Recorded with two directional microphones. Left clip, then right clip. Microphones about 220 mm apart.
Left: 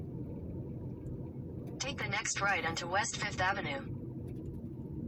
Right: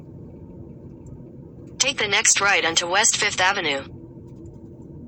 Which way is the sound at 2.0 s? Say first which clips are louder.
Right 14 dB; 60° right (ahead or behind).